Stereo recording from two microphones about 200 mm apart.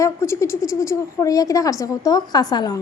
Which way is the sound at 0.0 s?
15° left (ahead or behind).